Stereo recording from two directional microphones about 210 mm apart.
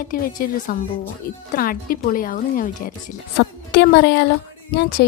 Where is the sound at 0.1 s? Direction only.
45° left (ahead or behind).